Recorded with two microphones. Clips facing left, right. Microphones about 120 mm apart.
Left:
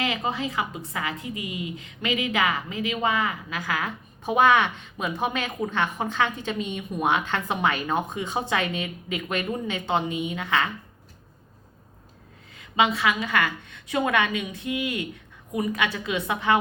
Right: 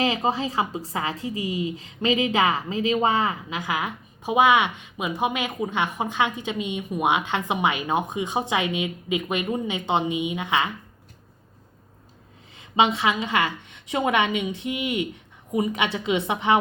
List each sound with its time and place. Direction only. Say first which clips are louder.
0.0 s a woman's voice: right 4 dB; 25° right (ahead or behind)
12.5 s a woman's voice: right 2 dB; 25° right (ahead or behind)